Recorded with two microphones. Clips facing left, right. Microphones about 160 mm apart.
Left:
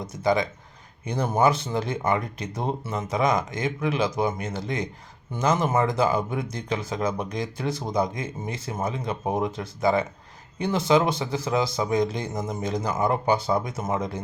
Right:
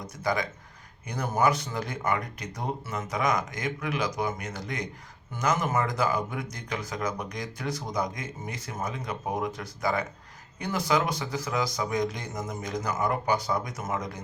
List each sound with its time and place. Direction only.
0.1 s speech: 25° left (ahead or behind)